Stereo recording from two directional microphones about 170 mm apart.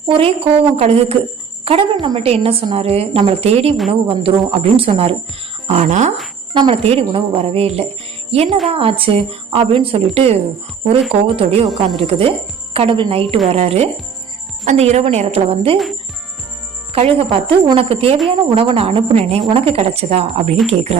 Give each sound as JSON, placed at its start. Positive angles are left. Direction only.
{"t": 0.1, "sound": "a woman's voice", "side_deg": -35}
{"t": 6.5, "sound": "a woman's voice", "side_deg": -30}
{"t": 8.3, "sound": "jingle bell", "side_deg": -35}
{"t": 8.7, "sound": "a woman's voice", "side_deg": -35}
{"t": 11.3, "sound": "a woman's voice", "side_deg": -35}
{"t": 16.9, "sound": "a woman's voice", "side_deg": -35}